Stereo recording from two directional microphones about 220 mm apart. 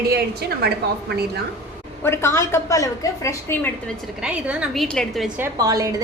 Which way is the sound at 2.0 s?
10° left (ahead or behind).